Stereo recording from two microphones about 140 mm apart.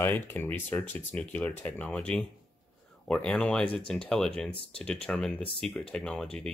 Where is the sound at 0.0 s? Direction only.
15° left (ahead or behind).